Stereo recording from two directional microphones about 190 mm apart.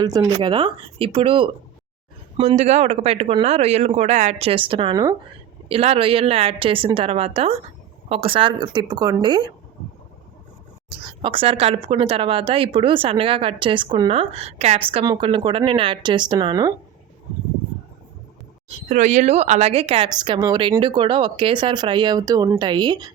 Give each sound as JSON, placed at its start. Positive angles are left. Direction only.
{"t": 0.0, "sound": "speech", "side_deg": -20}
{"t": 2.6, "sound": "speech", "side_deg": -35}
{"t": 10.8, "sound": "speech", "side_deg": -25}
{"t": 18.9, "sound": "speech", "side_deg": -40}